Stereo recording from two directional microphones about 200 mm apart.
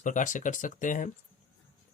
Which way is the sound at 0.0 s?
40° left (ahead or behind).